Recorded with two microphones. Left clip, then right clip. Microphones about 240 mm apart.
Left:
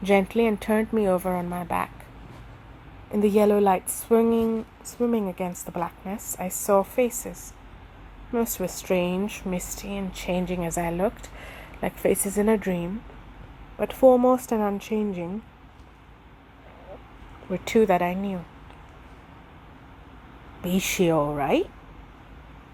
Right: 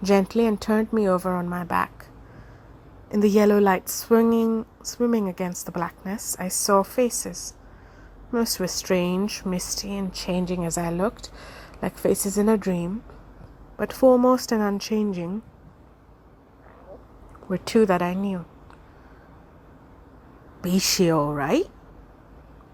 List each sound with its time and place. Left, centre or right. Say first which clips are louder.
0.1 s a woman's voice: even; right
3.1 s a woman's voice: right 1 dB; right
17.5 s a woman's voice: even; right
20.6 s a woman's voice: right 2 dB; right